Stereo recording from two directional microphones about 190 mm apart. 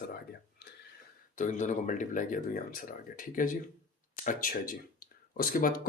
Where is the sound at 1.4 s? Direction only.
40° left (ahead or behind).